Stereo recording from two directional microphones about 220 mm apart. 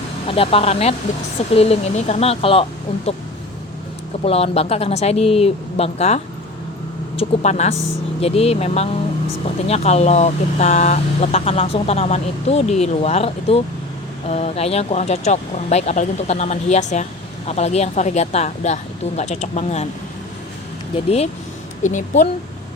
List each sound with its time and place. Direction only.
0.3 s speech: 25° left (ahead or behind)
4.2 s speech: 30° left (ahead or behind)
7.2 s speech: 30° left (ahead or behind)
21.8 s speech: 35° left (ahead or behind)